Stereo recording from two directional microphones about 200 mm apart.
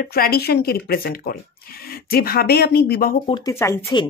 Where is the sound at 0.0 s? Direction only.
50° left (ahead or behind).